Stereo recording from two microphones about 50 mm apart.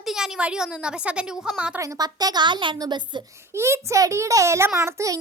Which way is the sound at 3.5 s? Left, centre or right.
Right.